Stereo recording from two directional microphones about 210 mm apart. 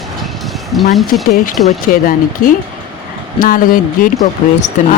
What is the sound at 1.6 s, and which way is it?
Speech, 40° left (ahead or behind).